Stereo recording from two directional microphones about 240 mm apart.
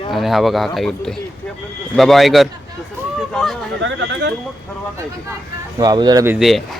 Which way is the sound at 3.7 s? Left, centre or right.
Right.